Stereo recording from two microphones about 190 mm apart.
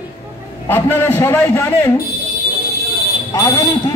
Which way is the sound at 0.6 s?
10° left (ahead or behind).